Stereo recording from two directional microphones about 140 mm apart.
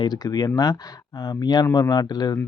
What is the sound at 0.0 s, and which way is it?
Speech, 30° left (ahead or behind).